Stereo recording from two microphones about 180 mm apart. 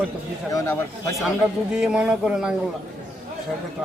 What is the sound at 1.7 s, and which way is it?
Speech, 5° right (ahead or behind).